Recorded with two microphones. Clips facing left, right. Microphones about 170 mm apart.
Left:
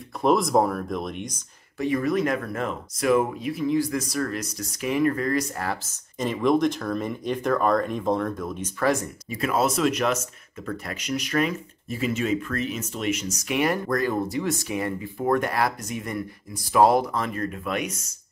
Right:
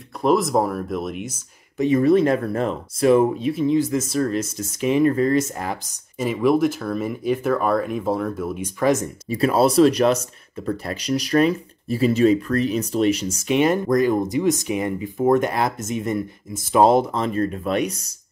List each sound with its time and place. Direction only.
0.2 s speech: centre (ahead or behind)
1.8 s speech: 25° right (ahead or behind)
9.3 s speech: 30° right (ahead or behind)